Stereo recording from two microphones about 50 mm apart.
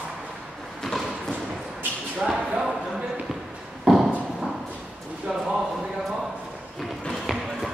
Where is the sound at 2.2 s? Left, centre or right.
Centre.